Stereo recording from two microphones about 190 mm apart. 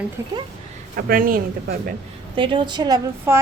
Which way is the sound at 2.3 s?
25° right (ahead or behind).